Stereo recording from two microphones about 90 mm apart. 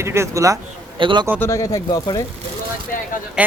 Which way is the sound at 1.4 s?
35° left (ahead or behind).